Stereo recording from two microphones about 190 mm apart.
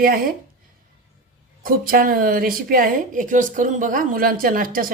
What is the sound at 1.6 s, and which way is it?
A woman's voice, 50° right (ahead or behind).